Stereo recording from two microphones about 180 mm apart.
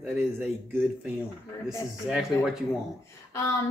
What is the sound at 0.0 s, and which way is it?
Speech, 10° right (ahead or behind).